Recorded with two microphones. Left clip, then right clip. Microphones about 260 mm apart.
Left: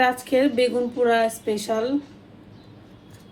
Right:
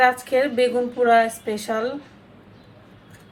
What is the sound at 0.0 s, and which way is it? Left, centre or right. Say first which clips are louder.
A woman's voice: right 2 dB; left.